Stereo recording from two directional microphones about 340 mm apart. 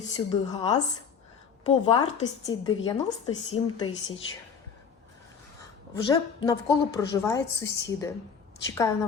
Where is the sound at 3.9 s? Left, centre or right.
Left.